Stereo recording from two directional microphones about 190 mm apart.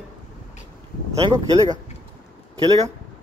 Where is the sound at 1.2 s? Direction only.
20° right (ahead or behind).